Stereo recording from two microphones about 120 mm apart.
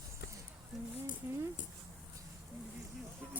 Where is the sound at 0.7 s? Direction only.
Centre (ahead or behind).